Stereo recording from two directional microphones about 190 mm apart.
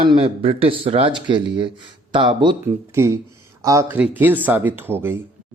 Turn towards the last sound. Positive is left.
turn(degrees=-10)  # may be behind; listen again after turning